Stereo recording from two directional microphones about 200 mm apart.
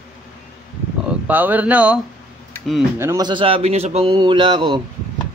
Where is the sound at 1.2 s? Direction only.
10° right (ahead or behind).